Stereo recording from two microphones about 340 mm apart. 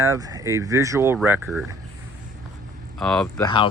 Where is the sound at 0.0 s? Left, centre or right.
Centre.